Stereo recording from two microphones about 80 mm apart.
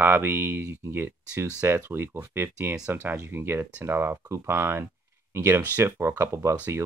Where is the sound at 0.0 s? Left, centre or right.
Right.